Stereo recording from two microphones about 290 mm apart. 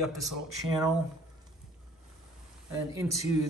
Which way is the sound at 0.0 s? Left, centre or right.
Centre.